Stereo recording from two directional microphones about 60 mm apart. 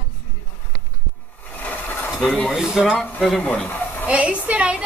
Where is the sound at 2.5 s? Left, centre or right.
Centre.